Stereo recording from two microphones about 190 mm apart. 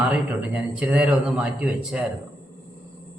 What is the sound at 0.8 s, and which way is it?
A man's voice, 5° right (ahead or behind).